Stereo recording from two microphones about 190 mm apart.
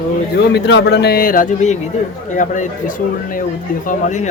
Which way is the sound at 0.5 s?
65° left (ahead or behind).